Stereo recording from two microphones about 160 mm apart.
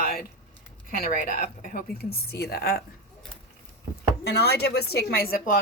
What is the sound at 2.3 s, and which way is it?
Speech, 80° left.